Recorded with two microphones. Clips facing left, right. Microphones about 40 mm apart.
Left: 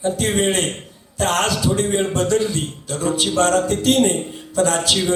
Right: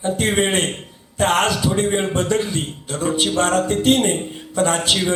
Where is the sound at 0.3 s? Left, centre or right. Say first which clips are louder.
Even; right.